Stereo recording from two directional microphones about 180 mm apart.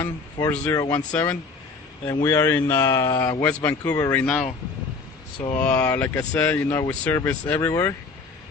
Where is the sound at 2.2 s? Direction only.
15° left (ahead or behind).